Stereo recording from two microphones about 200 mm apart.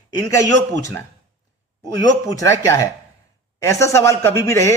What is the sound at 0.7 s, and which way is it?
Speech, 15° left (ahead or behind).